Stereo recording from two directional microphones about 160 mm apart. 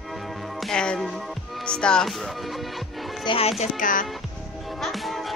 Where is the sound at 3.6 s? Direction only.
55° left (ahead or behind).